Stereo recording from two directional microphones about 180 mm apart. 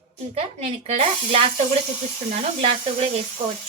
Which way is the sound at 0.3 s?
35° right (ahead or behind).